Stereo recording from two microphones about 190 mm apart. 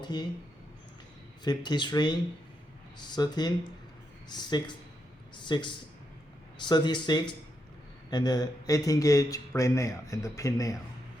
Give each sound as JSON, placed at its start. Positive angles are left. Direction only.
{"t": 0.0, "sound": "speech", "side_deg": 20}
{"t": 1.5, "sound": "speech", "side_deg": 25}